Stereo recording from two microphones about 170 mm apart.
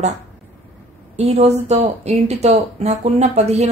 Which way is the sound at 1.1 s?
40° right (ahead or behind).